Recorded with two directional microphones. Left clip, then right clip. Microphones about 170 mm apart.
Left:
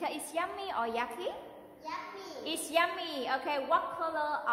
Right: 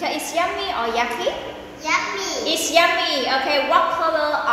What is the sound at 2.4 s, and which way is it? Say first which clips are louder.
A woman's voice: right 13 dB; 45° left (ahead or behind).